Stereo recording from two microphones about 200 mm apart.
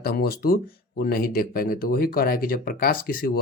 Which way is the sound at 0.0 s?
50° left (ahead or behind).